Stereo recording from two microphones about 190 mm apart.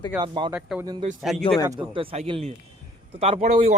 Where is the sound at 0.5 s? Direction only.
10° right (ahead or behind).